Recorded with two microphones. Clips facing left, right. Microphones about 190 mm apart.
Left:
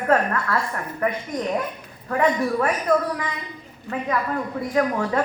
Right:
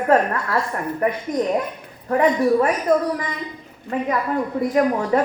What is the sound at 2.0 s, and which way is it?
Speech, 30° right (ahead or behind).